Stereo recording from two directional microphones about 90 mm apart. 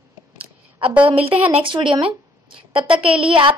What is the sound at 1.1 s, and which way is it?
Speech, 90° right.